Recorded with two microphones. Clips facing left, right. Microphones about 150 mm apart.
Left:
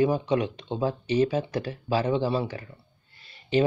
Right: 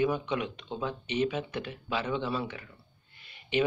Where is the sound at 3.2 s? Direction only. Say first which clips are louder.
Left 5 dB; 35° left (ahead or behind).